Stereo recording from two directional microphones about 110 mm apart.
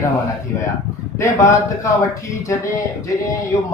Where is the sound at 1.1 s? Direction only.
25° left (ahead or behind).